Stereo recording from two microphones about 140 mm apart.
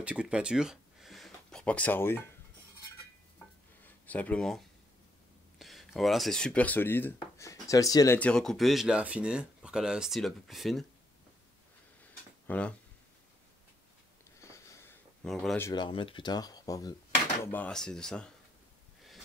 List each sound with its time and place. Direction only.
0.0 s speech: 5° right (ahead or behind); by 2.2 s 15° left (ahead or behind)
3.8 s speech: 10° left (ahead or behind)
8.2 s speech: 5° left (ahead or behind)
12.4 s speech: 10° left (ahead or behind)
14.4 s sniff: 20° left (ahead or behind)
15.2 s speech: centre (ahead or behind)
15.7 s speech: 35° left (ahead or behind)
17.5 s speech: 10° left (ahead or behind)